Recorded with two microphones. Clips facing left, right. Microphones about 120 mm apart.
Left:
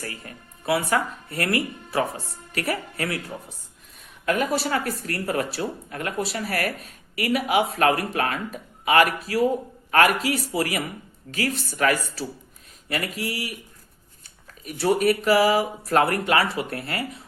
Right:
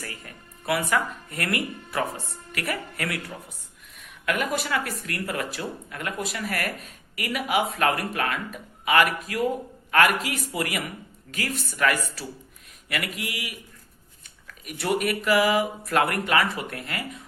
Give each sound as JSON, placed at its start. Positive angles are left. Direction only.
{"t": 0.0, "sound": "speech", "side_deg": 30}